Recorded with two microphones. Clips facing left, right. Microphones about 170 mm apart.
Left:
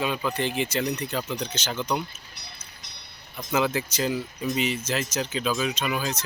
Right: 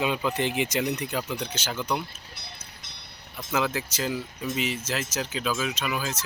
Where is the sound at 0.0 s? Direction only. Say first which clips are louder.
Right 1 dB; 15° right (ahead or behind).